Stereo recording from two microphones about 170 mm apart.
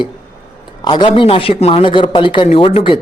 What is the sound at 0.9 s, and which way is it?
Speech, 25° left (ahead or behind).